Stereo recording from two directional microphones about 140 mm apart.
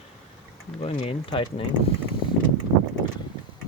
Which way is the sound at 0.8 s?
45° left (ahead or behind).